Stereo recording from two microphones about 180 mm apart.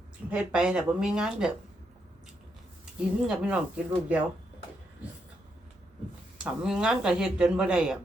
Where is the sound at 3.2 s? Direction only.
5° right (ahead or behind).